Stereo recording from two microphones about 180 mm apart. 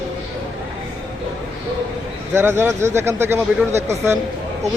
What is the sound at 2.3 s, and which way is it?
Speech, 15° right (ahead or behind).